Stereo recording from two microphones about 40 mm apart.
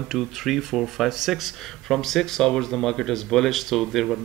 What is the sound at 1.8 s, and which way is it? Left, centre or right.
Speech, centre.